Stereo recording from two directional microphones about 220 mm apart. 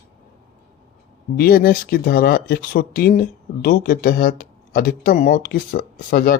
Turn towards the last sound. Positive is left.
turn(degrees=45)  # may be behind; listen again after turning